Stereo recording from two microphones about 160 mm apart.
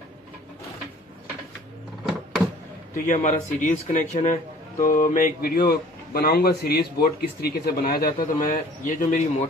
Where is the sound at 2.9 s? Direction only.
50° left (ahead or behind).